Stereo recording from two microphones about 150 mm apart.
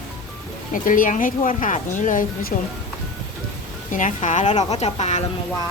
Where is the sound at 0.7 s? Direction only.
60° left (ahead or behind).